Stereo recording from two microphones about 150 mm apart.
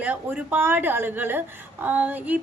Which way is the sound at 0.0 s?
10° right (ahead or behind).